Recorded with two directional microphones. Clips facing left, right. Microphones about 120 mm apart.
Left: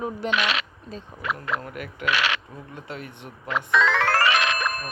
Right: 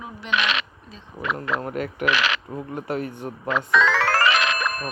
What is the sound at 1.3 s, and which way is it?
Speech, 30° right (ahead or behind).